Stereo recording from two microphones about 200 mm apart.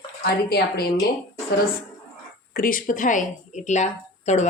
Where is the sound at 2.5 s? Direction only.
45° left (ahead or behind).